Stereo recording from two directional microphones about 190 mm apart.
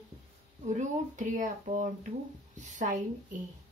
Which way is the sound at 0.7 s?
40° right (ahead or behind).